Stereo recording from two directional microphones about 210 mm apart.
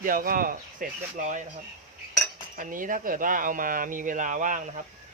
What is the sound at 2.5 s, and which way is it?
Speech, 40° right (ahead or behind).